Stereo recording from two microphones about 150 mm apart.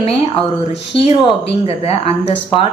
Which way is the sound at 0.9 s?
40° left (ahead or behind).